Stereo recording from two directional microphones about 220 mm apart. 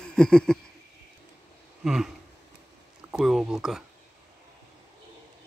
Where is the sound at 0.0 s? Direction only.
5° left (ahead or behind).